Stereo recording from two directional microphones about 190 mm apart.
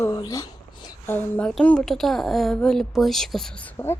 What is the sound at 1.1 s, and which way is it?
A woman's voice, 5° left (ahead or behind).